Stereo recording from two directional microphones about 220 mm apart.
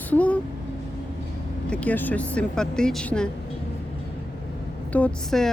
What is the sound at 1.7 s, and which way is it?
Speech, 5° left (ahead or behind).